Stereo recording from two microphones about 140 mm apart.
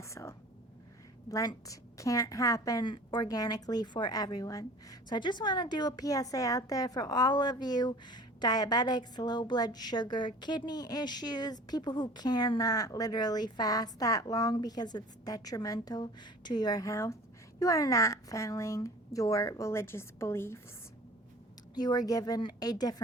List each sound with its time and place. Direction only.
0.0 s whispering: 20° left (ahead or behind)
1.3 s a woman's voice: 25° left (ahead or behind)
21.8 s a woman's voice: 30° left (ahead or behind)